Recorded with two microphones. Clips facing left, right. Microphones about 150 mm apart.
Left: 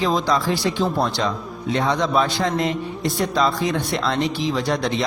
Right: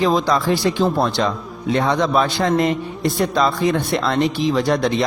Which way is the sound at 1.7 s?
60° right (ahead or behind).